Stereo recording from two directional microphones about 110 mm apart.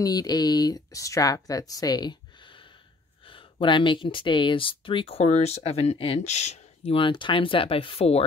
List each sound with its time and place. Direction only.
0.0 s speech: 35° left (ahead or behind); by 8.2 s 60° left (ahead or behind)